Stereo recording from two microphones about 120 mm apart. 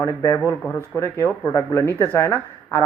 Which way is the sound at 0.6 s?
15° left (ahead or behind).